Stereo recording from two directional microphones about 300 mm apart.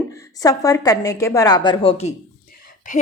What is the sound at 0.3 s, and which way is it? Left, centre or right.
Speech, centre.